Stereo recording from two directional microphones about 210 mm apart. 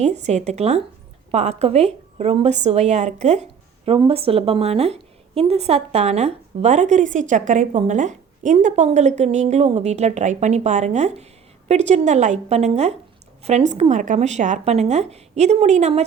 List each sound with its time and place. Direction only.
0.0 s a woman's voice: 30° right (ahead or behind)